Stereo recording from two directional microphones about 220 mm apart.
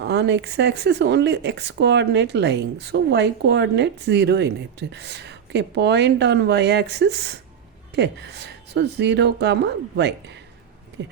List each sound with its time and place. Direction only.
0.0 s speech: 50° right (ahead or behind)